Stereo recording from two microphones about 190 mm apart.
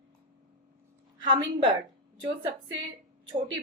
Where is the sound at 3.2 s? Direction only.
25° right (ahead or behind).